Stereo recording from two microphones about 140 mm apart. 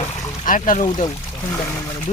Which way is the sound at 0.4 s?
70° left (ahead or behind).